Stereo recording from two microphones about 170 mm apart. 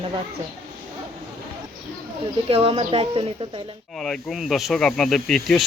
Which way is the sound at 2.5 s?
35° right (ahead or behind).